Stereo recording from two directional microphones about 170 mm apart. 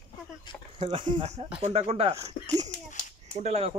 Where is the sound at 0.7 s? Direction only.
30° right (ahead or behind).